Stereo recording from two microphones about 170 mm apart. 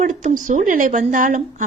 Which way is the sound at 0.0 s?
45° right (ahead or behind).